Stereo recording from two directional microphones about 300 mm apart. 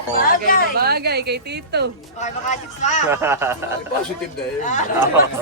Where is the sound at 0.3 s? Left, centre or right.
Left.